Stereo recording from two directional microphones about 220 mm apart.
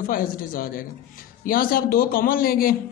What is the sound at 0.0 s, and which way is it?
A man's voice, 40° left (ahead or behind).